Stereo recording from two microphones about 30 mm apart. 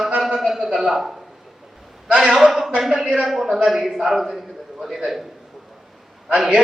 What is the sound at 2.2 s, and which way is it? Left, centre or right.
A man's voice, centre.